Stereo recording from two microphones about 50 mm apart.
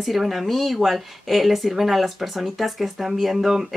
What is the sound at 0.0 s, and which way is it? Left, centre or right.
Speech, centre.